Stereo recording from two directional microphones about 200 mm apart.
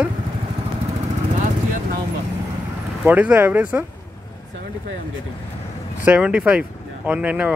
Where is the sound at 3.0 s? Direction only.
5° right (ahead or behind).